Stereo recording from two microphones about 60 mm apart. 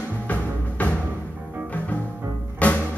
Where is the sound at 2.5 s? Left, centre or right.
Left.